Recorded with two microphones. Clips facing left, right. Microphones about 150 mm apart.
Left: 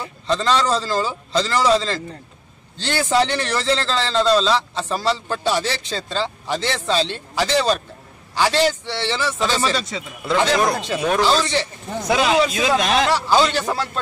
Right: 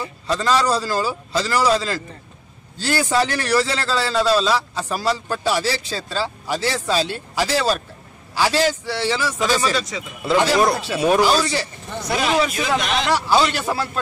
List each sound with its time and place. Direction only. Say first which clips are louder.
0.0 s a man's voice: left 1 dB; 5° right (ahead or behind)
9.8 s speech: right 1 dB; 30° left (ahead or behind)
10.2 s speech: right 2 dB; 5° right (ahead or behind)
12.1 s speech: left 2 dB; 90° left
13.1 s a man's voice: left 1 dB; 10° right (ahead or behind)